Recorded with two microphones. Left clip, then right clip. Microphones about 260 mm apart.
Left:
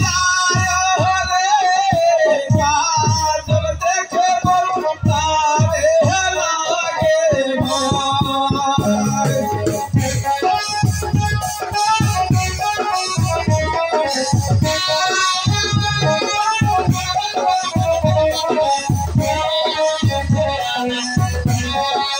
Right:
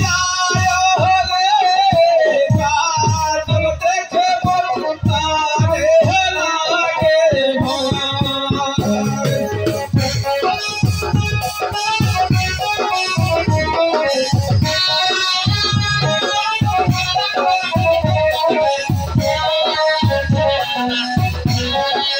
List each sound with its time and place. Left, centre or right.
0.1 s music: right
5.3 s music: right
15.0 s music: right
18.1 s music: right